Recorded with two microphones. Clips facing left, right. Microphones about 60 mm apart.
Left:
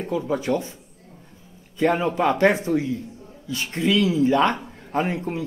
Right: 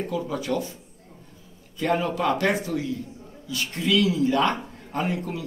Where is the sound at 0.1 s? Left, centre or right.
Left.